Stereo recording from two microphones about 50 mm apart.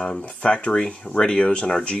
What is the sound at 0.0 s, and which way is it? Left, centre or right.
Speech, left.